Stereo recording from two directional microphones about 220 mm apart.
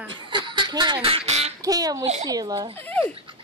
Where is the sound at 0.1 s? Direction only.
20° right (ahead or behind).